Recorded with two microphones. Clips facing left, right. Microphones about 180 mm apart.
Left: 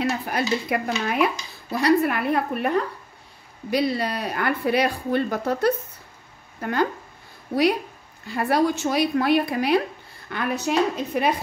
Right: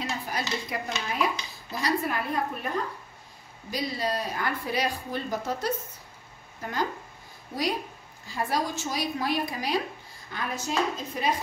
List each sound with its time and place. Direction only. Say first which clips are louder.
0.2 s speech: left 7 dB; 60° left (ahead or behind)
8.3 s speech: left 8 dB; 65° left (ahead or behind)